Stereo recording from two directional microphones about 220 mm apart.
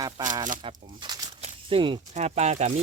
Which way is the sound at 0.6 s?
20° right (ahead or behind).